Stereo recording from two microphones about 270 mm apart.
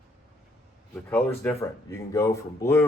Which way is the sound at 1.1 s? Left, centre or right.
Centre.